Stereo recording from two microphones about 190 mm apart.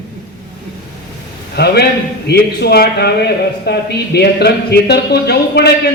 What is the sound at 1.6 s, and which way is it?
Speech, 55° left (ahead or behind).